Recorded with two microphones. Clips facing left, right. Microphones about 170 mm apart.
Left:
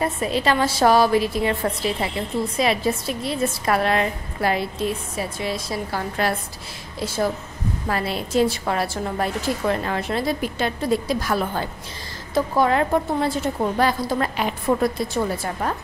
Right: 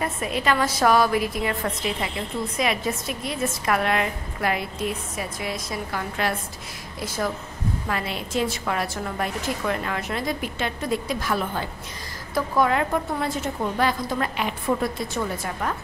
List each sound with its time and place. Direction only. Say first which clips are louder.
0.0 s a woman's voice: left 4 dB; 30° left (ahead or behind)